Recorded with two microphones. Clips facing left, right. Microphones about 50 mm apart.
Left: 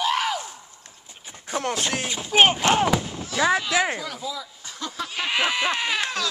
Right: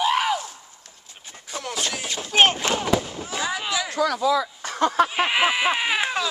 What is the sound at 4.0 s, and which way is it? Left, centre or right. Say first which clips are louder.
Speech: right 11 dB; right.